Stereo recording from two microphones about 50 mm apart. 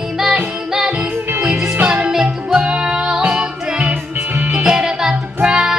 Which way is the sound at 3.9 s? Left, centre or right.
Right.